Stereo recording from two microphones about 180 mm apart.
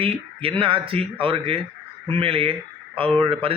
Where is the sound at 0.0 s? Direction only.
30° right (ahead or behind).